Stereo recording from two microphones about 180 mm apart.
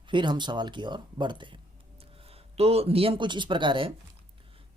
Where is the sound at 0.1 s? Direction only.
25° right (ahead or behind).